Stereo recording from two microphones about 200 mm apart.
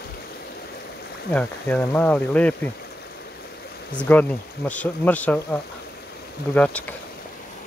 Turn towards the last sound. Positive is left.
turn(degrees=5)  # may be behind; listen again after turning